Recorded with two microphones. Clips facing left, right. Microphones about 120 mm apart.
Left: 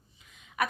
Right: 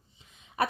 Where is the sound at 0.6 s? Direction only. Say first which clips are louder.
Right 2 dB; 35° right (ahead or behind).